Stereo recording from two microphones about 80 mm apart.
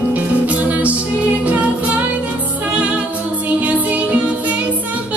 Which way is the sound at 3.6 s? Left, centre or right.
Centre.